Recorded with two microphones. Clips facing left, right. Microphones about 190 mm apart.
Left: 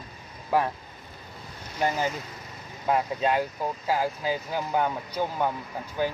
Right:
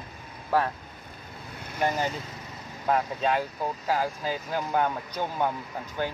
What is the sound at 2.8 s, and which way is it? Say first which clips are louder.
Speech: left 1 dB; 5° left (ahead or behind).